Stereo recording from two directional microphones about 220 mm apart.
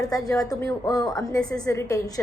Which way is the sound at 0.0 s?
15° left (ahead or behind).